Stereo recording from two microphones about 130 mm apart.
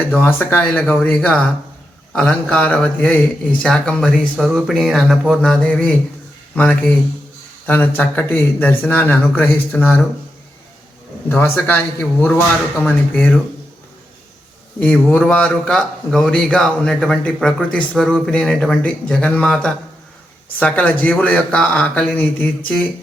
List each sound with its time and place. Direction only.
0.2 s a man's voice: 15° left (ahead or behind)
11.3 s a man's voice: 15° left (ahead or behind)
14.8 s a man's voice: 10° left (ahead or behind)